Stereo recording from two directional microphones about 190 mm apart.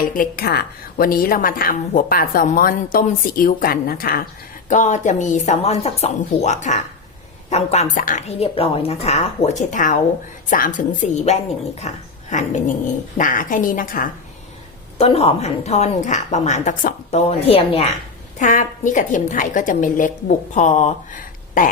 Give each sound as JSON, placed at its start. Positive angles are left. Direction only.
{"t": 0.1, "sound": "a woman's voice", "side_deg": 50}
{"t": 4.7, "sound": "a woman's voice", "side_deg": 40}
{"t": 14.9, "sound": "a woman's voice", "side_deg": 30}
{"t": 18.3, "sound": "a woman's voice", "side_deg": 40}